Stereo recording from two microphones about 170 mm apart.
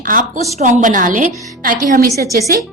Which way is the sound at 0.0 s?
50° right (ahead or behind).